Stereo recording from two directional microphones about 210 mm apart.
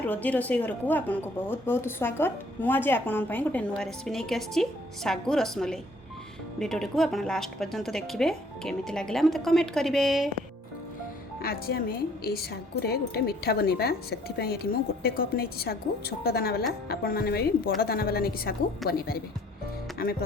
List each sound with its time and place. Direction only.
0.1 s speech: 5° left (ahead or behind)
11.4 s a woman's voice: 45° left (ahead or behind)